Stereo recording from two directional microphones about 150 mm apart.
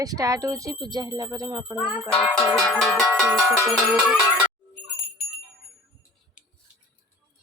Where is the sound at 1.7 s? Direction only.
5° left (ahead or behind).